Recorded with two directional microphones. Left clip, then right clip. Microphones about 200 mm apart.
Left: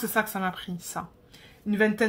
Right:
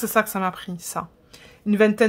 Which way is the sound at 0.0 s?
35° right (ahead or behind).